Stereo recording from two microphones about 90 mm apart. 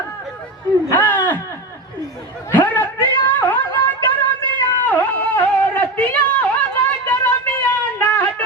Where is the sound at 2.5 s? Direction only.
20° left (ahead or behind).